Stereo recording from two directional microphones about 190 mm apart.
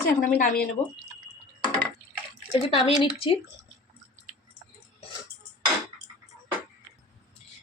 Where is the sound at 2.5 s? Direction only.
30° left (ahead or behind).